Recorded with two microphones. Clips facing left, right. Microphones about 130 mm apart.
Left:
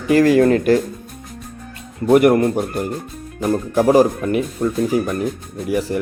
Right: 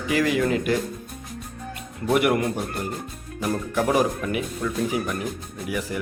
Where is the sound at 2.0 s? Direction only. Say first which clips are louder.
Left 8 dB; 40° left (ahead or behind).